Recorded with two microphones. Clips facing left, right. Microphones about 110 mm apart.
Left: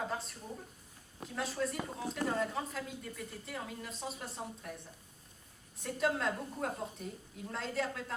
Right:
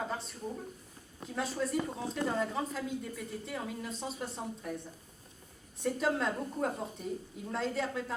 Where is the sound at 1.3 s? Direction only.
Centre (ahead or behind).